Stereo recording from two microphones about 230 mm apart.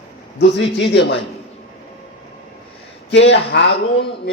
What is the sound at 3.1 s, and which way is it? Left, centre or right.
Speech, left.